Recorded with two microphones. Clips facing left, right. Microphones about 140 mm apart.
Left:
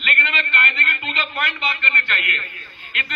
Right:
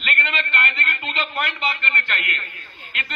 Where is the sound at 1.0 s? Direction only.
35° right (ahead or behind).